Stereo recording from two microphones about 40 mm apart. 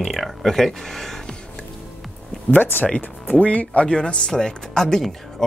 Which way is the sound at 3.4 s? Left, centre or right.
Left.